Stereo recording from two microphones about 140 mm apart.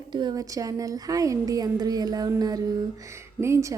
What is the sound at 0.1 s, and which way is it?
A woman's voice, 30° right (ahead or behind).